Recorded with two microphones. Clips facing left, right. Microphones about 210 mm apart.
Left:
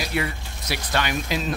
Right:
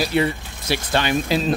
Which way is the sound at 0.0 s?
30° right (ahead or behind).